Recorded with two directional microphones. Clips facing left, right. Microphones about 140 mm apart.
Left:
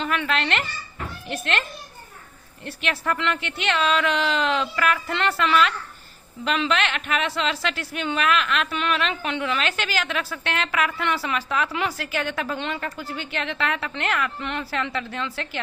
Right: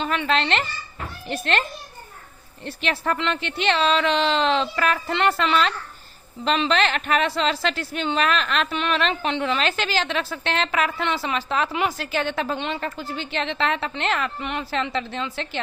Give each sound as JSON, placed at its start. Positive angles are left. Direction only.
{"t": 0.0, "sound": "a woman's voice", "side_deg": -25}
{"t": 2.6, "sound": "a woman's voice", "side_deg": -25}
{"t": 8.7, "sound": "a woman's voice", "side_deg": -25}